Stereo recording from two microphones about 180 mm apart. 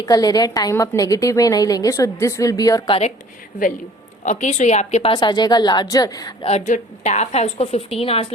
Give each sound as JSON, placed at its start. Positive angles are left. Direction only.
{"t": 0.0, "sound": "a woman's voice", "side_deg": 20}
{"t": 4.2, "sound": "a woman's voice", "side_deg": 40}
{"t": 6.4, "sound": "speech", "side_deg": 40}